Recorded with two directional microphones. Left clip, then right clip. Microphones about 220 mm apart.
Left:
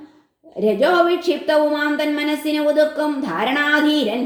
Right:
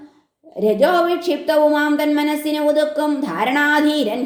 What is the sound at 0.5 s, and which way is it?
A woman's voice, 30° right (ahead or behind).